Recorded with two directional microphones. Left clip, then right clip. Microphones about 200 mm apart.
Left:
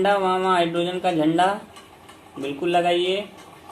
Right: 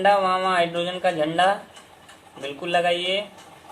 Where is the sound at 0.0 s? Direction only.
10° left (ahead or behind).